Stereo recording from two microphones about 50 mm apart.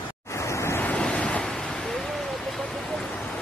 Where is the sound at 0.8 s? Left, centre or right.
Centre.